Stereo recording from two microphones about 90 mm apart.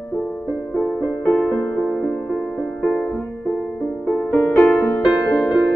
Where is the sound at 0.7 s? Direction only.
10° left (ahead or behind).